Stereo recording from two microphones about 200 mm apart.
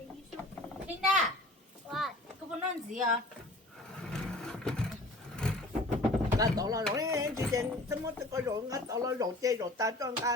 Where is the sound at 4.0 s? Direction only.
5° left (ahead or behind).